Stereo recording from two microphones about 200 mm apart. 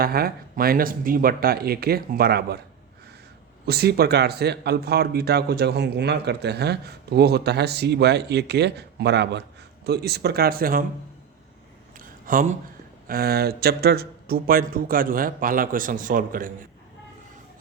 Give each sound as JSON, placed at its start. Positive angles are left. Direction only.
{"t": 0.0, "sound": "speech", "side_deg": -50}
{"t": 3.7, "sound": "speech", "side_deg": -50}
{"t": 11.9, "sound": "a sound", "side_deg": -45}
{"t": 13.1, "sound": "speech", "side_deg": -50}